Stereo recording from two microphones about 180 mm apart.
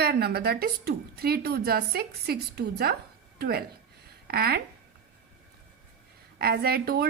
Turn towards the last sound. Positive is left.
turn(degrees=-60)  # may be behind; listen again after turning